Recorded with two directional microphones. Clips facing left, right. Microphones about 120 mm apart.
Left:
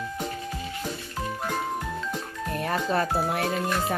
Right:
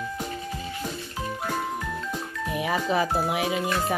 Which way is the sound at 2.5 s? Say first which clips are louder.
Right 1 dB; 5° right (ahead or behind).